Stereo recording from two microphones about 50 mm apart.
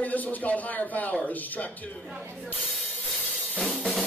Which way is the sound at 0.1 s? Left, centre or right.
Left.